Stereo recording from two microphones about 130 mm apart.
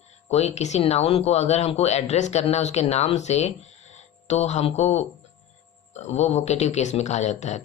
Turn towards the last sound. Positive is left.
turn(degrees=60)  # may be behind; listen again after turning